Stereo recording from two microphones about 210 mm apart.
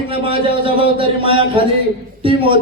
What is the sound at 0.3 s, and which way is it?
Speech, 25° right (ahead or behind).